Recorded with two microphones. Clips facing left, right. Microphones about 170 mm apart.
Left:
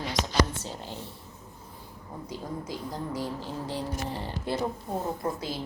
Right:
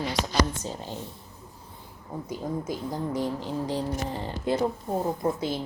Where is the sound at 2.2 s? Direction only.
20° right (ahead or behind).